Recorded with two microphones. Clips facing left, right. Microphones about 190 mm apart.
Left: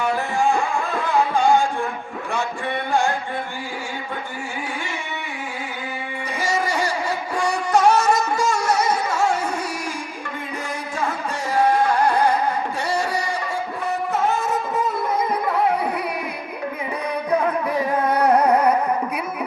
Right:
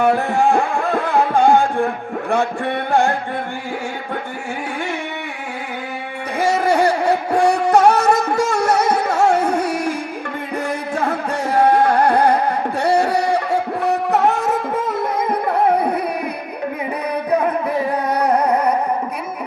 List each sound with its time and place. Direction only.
0.0 s music: 60° right (ahead or behind)
2.3 s a sound: 60° right (ahead or behind)
6.4 s music: 60° right (ahead or behind)
10.9 s music: 60° right (ahead or behind)